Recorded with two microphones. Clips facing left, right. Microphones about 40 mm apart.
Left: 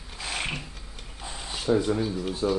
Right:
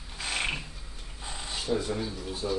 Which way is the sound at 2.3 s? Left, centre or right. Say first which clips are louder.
Left 5 dB; left.